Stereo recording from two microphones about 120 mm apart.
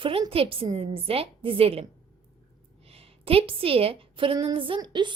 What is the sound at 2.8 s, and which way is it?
A woman's voice, 55° right (ahead or behind).